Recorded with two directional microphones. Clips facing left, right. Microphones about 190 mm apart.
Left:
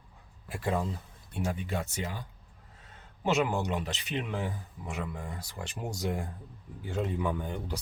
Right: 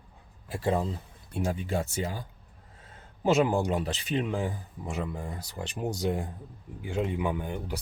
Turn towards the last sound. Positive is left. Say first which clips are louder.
# right 2 dB
turn(degrees=-10)  # may be behind; listen again after turning